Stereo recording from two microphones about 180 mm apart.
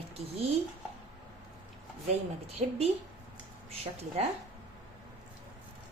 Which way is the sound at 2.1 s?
35° right (ahead or behind).